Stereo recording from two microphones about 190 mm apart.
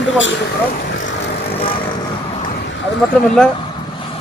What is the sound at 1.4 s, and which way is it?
Vehicle, 30° left (ahead or behind).